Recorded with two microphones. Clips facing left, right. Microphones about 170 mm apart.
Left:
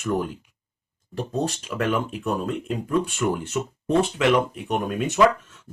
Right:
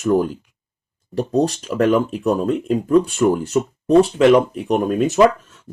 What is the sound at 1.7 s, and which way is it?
Speech, 35° right (ahead or behind).